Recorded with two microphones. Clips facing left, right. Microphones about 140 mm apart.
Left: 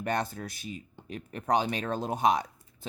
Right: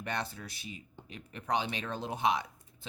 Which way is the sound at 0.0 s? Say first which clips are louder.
Left 6 dB; 45° left (ahead or behind).